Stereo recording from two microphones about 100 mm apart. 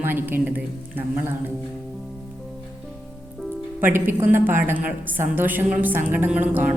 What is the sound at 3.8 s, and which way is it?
A woman's voice, 20° right (ahead or behind).